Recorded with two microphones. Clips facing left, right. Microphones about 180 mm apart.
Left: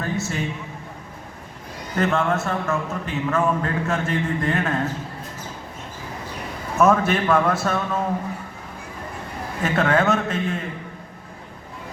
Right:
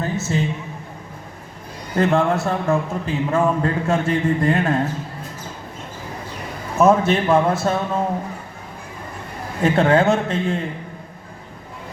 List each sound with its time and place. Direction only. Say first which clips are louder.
0.0 s a sound: right 2 dB; 25° right (ahead or behind)
2.0 s a man's voice: right 4 dB; 35° right (ahead or behind)
6.7 s a man's voice: right 3 dB; 25° right (ahead or behind)
9.6 s a man's voice: right 4 dB; 30° right (ahead or behind)